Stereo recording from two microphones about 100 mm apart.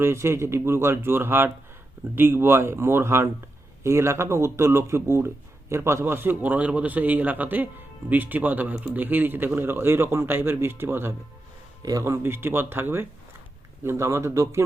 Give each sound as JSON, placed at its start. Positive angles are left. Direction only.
{"t": 0.0, "sound": "speech", "side_deg": -25}
{"t": 11.8, "sound": "speech", "side_deg": -35}